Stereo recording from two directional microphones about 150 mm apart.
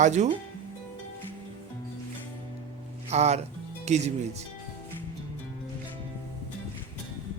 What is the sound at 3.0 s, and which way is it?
Speech, 45° right (ahead or behind).